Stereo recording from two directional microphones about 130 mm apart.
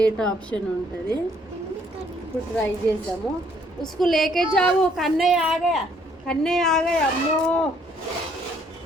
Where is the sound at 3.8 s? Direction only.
Centre (ahead or behind).